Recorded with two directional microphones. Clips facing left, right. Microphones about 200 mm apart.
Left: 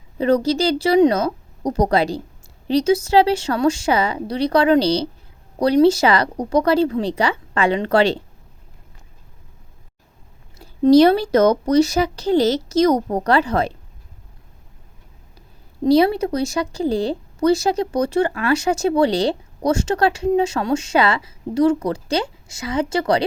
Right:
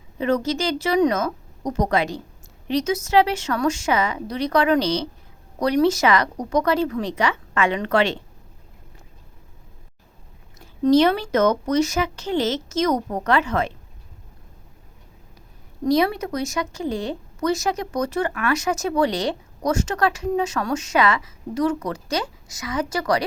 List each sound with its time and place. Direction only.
0.2 s speech: 35° left (ahead or behind)
10.6 s speech: 35° left (ahead or behind)
15.8 s speech: 30° left (ahead or behind)